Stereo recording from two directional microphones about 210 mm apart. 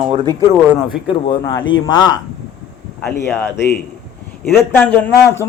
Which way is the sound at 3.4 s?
10° left (ahead or behind).